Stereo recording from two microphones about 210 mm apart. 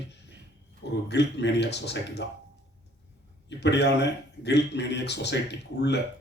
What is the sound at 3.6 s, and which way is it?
Speech, 55° left (ahead or behind).